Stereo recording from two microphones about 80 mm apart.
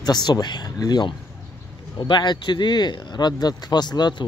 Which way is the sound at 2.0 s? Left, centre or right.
Left.